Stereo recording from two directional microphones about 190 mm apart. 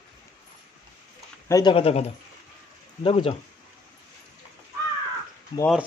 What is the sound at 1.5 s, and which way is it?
Speech, 20° left (ahead or behind).